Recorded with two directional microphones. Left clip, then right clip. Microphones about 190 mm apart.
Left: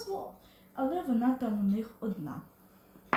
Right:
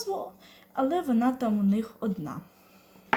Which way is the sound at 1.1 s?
20° right (ahead or behind).